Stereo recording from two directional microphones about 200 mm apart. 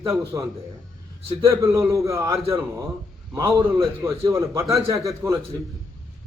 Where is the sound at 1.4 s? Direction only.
15° right (ahead or behind).